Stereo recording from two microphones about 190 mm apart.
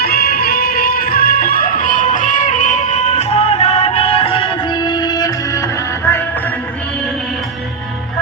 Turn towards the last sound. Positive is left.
turn(degrees=10)  # may be behind; listen again after turning